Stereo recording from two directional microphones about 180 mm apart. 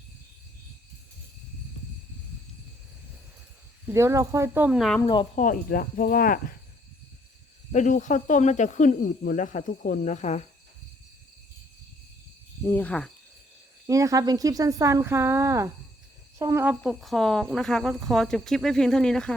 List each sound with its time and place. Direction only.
3.8 s speech: 15° right (ahead or behind)
5.3 s speech: 45° left (ahead or behind)
7.7 s speech: 45° left (ahead or behind)
12.6 s speech: 10° left (ahead or behind)
13.8 s speech: 20° right (ahead or behind)
16.8 s speech: centre (ahead or behind)